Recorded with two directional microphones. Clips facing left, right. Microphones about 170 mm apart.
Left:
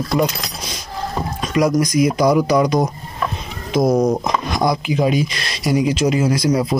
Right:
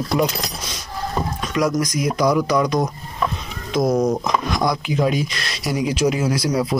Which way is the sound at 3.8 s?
20° left (ahead or behind).